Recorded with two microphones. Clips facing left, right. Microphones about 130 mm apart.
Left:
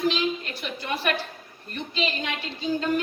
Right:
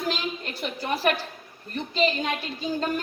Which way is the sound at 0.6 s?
40° right (ahead or behind).